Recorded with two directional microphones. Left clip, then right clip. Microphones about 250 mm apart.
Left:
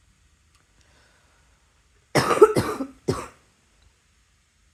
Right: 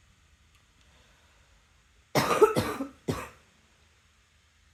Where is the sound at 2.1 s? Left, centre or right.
Left.